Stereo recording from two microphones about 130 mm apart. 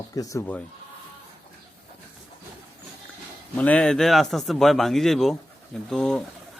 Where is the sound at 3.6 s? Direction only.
10° left (ahead or behind).